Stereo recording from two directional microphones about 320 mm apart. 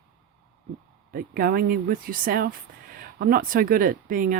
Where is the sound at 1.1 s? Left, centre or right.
Right.